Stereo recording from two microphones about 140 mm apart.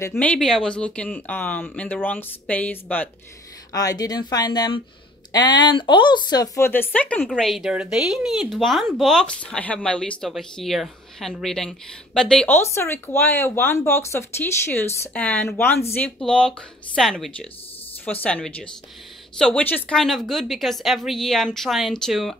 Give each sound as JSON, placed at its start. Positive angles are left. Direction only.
{"t": 0.0, "sound": "speech", "side_deg": 15}
{"t": 3.7, "sound": "speech", "side_deg": 25}
{"t": 7.2, "sound": "speech", "side_deg": 0}